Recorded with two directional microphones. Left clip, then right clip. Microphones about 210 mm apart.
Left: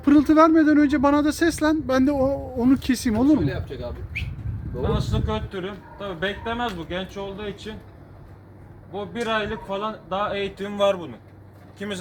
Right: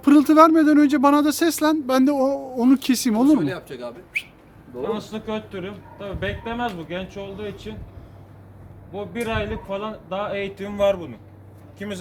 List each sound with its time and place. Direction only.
0.0 s speech: 15° right (ahead or behind)
3.3 s speech: 25° right (ahead or behind)
4.8 s speech: 10° right (ahead or behind)
8.9 s speech: 10° right (ahead or behind)